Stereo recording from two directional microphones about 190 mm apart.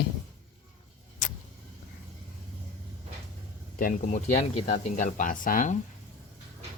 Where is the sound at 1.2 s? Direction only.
40° left (ahead or behind).